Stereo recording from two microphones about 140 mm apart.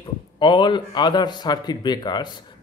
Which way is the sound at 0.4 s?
35° left (ahead or behind).